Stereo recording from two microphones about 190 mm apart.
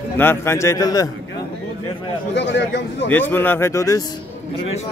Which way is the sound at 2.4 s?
65° left (ahead or behind).